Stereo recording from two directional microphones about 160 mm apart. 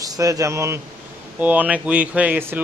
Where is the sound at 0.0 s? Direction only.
20° right (ahead or behind).